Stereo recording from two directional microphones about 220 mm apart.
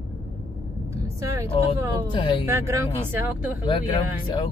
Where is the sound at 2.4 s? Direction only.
10° right (ahead or behind).